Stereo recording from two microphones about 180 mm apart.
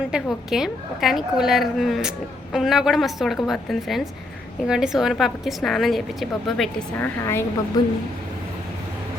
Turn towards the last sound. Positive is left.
turn(degrees=20)  # may be behind; listen again after turning